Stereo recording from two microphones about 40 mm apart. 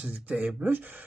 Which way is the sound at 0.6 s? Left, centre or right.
Right.